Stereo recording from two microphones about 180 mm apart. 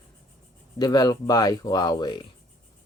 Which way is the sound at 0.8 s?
20° left (ahead or behind).